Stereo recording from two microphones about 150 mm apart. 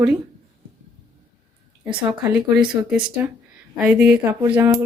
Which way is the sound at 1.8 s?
10° right (ahead or behind).